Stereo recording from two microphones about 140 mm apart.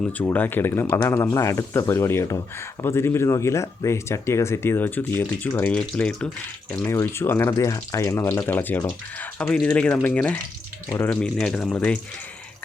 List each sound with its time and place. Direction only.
0.2 s speech: 15° left (ahead or behind)
6.9 s speech: 20° left (ahead or behind)